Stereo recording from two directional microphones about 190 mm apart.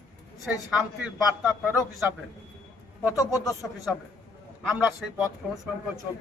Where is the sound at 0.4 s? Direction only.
5° right (ahead or behind).